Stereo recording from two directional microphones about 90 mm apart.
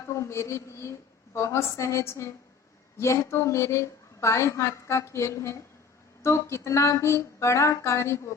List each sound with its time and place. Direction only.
0.0 s a woman's voice: 35° left (ahead or behind)